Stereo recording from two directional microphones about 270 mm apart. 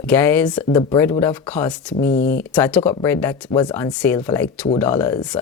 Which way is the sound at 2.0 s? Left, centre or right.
Left.